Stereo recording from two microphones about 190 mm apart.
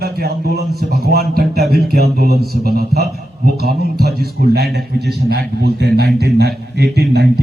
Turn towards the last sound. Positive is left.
turn(degrees=-60)  # may be behind; listen again after turning